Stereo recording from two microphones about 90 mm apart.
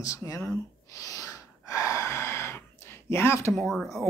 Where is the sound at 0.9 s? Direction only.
40° left (ahead or behind).